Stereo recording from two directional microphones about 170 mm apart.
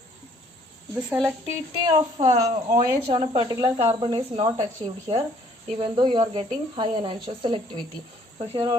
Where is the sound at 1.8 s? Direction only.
25° right (ahead or behind).